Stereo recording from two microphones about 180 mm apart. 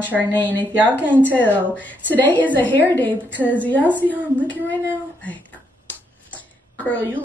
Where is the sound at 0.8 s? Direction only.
10° right (ahead or behind).